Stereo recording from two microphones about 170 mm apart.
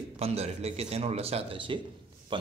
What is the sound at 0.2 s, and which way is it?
Speech, 40° right (ahead or behind).